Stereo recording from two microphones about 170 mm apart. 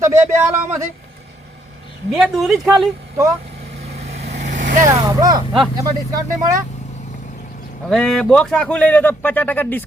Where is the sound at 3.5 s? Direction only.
70° right (ahead or behind).